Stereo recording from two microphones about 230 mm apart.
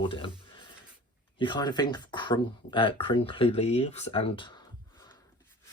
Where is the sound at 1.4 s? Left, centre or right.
Centre.